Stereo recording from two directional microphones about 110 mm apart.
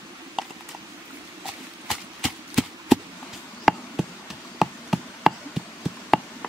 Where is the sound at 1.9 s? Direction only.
Centre (ahead or behind).